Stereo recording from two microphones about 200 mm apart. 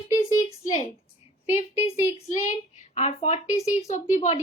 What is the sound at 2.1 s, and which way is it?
A woman's voice, 35° left (ahead or behind).